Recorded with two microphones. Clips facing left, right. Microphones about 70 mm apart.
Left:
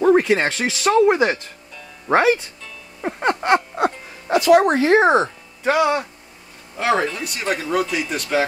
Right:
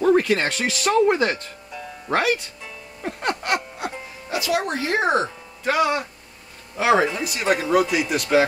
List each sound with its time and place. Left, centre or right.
0.0 s speech: centre
2.0 s speech: left
3.0 s music: left
4.3 s speech: left
4.6 s speech: left
5.2 s music: centre
5.8 s a man's voice: centre